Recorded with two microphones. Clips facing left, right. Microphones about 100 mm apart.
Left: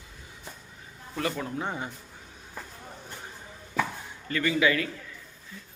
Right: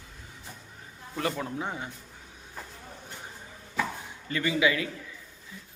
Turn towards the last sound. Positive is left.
turn(degrees=-15)  # may be behind; listen again after turning